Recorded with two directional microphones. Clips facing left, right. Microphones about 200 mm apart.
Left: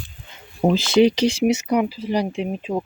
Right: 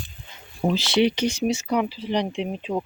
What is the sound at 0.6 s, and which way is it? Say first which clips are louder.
Speech: left 5 dB; 50° left (ahead or behind).